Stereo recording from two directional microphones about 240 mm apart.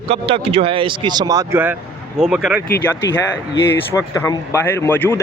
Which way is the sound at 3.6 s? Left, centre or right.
Centre.